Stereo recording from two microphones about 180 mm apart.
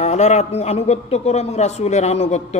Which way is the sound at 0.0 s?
40° left (ahead or behind).